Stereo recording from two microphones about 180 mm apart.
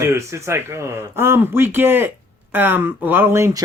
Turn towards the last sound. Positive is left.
turn(degrees=-15)  # may be behind; listen again after turning